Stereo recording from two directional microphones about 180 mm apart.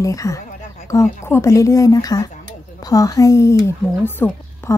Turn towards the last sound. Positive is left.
turn(degrees=10)  # may be behind; listen again after turning